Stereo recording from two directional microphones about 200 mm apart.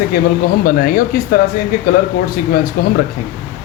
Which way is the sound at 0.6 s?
45° left (ahead or behind).